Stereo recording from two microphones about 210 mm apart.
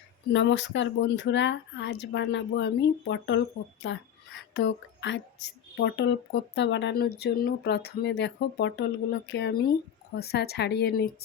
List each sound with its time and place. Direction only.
0.3 s speech: 60° left (ahead or behind)
4.5 s a sound: 60° left (ahead or behind)
5.7 s speech: 60° left (ahead or behind)